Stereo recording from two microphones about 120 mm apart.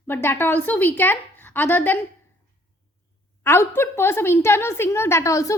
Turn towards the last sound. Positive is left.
turn(degrees=25)  # may be behind; listen again after turning